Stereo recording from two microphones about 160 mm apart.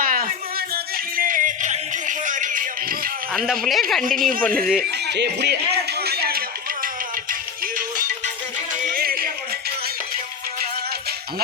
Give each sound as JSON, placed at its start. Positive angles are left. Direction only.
{"t": 0.0, "sound": "a sound", "side_deg": -60}
{"t": 1.1, "sound": "music", "side_deg": -55}
{"t": 3.3, "sound": "speech", "side_deg": 0}
{"t": 4.2, "sound": "speech", "side_deg": -60}
{"t": 4.4, "sound": "speech", "side_deg": 5}
{"t": 5.0, "sound": "speech", "side_deg": -90}
{"t": 6.1, "sound": "a sound", "side_deg": -75}
{"t": 7.8, "sound": "music", "side_deg": -55}